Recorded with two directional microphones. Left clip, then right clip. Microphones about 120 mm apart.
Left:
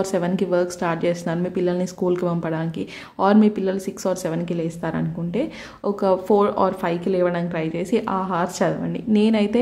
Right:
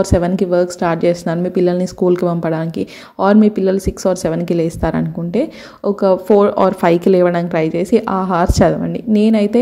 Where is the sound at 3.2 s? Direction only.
30° right (ahead or behind); by 5.4 s 50° right (ahead or behind).